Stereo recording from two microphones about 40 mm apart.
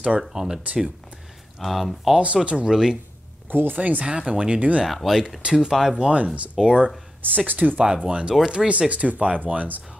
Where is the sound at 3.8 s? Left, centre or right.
Right.